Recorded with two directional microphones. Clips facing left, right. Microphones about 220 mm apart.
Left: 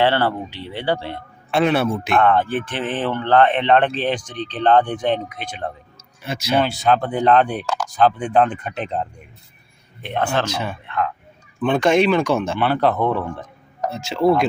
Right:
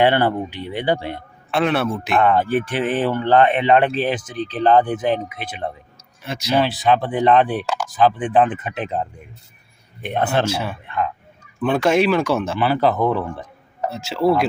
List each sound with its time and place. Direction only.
0.0 s speech: 15° right (ahead or behind)
1.5 s speech: centre (ahead or behind)
10.0 s speech: 15° right (ahead or behind)
10.4 s speech: 5° right (ahead or behind)